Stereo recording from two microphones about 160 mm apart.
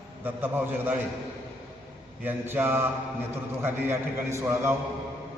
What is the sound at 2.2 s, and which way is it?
A man's voice, 15° right (ahead or behind).